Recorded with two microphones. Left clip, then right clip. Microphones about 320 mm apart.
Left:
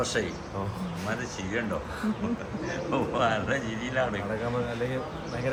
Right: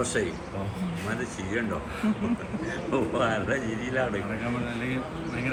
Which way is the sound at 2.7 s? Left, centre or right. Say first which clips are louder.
Right 1 dB; left.